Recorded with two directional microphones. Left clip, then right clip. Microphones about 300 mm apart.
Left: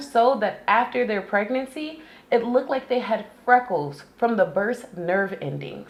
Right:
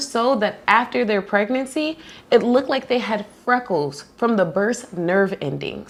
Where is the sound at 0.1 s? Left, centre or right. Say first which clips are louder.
Left 1 dB; right.